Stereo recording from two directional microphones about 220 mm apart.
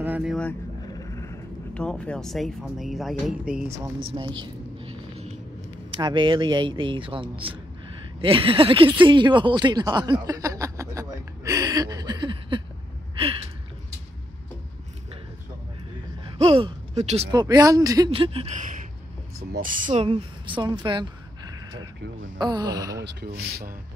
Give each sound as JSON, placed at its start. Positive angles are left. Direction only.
{"t": 0.0, "sound": "speech", "side_deg": -5}
{"t": 0.9, "sound": "speech", "side_deg": 15}
{"t": 4.4, "sound": "a sound", "side_deg": -25}
{"t": 5.9, "sound": "speech", "side_deg": -20}
{"t": 9.0, "sound": "a sound", "side_deg": -20}
{"t": 16.3, "sound": "gasp", "side_deg": -25}
{"t": 17.3, "sound": "speech", "side_deg": -20}
{"t": 22.4, "sound": "music", "side_deg": -20}
{"t": 23.0, "sound": "speech", "side_deg": -60}